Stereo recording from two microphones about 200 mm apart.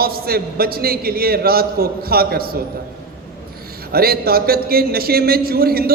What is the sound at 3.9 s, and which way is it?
A man's voice, 50° right (ahead or behind).